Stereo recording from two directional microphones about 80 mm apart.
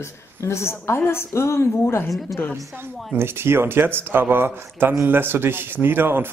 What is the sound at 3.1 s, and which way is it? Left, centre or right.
Speech, right.